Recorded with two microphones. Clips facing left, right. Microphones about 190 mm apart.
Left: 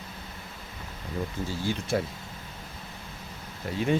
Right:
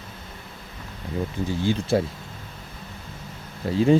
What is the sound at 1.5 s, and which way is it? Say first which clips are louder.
Speech: right 7 dB; 25° right (ahead or behind).